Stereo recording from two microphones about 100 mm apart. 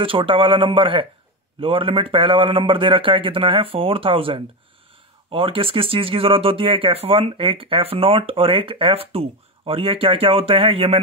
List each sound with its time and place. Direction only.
0.0 s a man's voice: 60° right (ahead or behind)